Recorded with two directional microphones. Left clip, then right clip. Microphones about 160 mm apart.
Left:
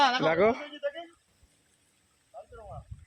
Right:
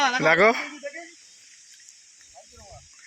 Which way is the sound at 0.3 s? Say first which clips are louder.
Right 7 dB; centre (ahead or behind).